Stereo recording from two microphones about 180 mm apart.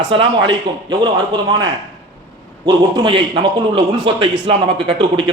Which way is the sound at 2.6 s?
25° right (ahead or behind).